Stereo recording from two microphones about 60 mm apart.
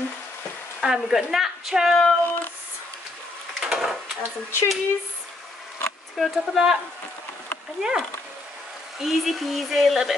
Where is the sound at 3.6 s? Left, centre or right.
Centre.